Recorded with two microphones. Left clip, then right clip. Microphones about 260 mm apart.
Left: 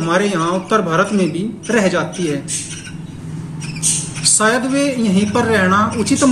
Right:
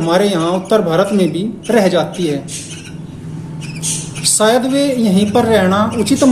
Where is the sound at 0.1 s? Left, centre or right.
Centre.